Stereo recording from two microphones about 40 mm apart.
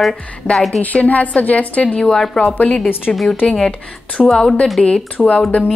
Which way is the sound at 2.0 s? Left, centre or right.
Centre.